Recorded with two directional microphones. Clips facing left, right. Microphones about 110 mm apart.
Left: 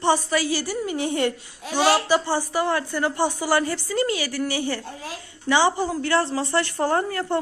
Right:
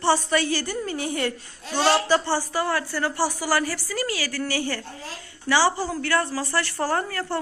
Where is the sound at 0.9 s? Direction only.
20° left (ahead or behind).